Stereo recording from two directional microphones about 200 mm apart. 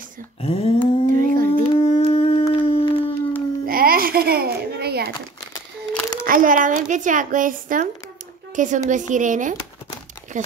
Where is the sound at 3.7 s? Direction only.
45° right (ahead or behind).